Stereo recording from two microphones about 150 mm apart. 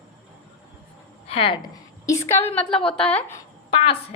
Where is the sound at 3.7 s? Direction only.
35° left (ahead or behind).